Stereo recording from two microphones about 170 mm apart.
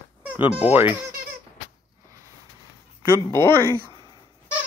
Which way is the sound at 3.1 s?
15° left (ahead or behind).